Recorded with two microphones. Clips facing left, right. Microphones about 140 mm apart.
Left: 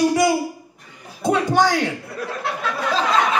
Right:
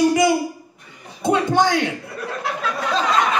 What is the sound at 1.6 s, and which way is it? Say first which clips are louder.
Speech: left 1 dB; 20° right (ahead or behind).